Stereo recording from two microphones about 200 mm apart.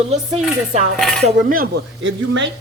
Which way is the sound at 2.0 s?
70° right (ahead or behind).